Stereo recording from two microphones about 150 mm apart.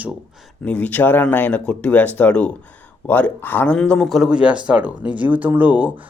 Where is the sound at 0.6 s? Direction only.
10° left (ahead or behind); by 5.9 s 10° right (ahead or behind).